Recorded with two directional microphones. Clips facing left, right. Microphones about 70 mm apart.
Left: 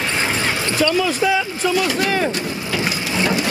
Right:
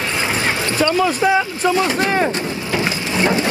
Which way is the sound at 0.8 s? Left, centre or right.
Right.